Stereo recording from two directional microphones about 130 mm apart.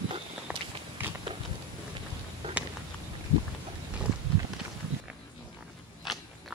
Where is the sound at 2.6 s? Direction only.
10° right (ahead or behind).